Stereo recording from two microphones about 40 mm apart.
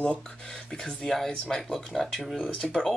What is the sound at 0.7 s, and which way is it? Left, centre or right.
Speech, centre.